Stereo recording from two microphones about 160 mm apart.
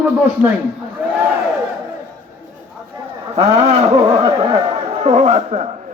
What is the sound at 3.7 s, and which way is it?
A man's voice, 40° right (ahead or behind).